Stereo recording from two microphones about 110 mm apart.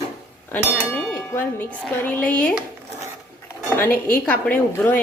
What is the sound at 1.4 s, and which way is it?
A woman's voice, 20° left (ahead or behind).